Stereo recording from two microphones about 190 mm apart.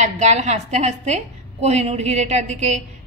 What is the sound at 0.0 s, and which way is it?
A woman's voice, 35° right (ahead or behind).